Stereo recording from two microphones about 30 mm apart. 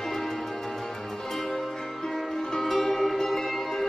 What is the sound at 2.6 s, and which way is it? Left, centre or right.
Music, centre.